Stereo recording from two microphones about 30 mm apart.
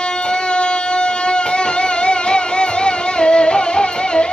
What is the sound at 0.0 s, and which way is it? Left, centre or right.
Music, left.